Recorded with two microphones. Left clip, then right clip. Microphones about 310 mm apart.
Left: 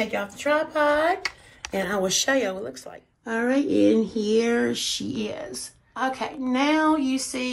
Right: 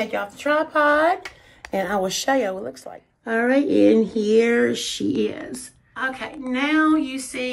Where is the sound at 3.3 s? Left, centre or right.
Centre.